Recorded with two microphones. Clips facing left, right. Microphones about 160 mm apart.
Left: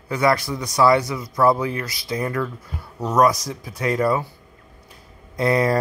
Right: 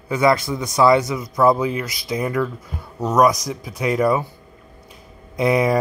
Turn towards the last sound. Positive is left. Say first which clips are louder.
# right 2 dB
turn(degrees=-15)  # may be behind; listen again after turning